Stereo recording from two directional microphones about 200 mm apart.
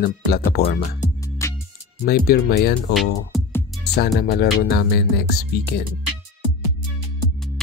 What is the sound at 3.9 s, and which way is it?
Speech, 55° left (ahead or behind).